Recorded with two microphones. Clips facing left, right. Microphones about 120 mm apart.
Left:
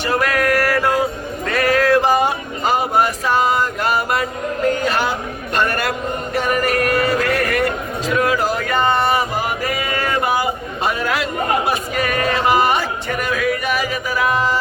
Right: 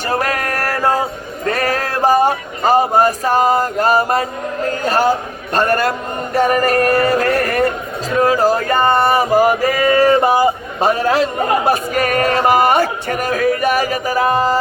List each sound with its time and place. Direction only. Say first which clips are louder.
0.0 s music: left 1 dB; 40° right (ahead or behind)
1.5 s a sound: left 3 dB; 40° right (ahead or behind)
4.9 s male singing: right 5 dB; 40° right (ahead or behind)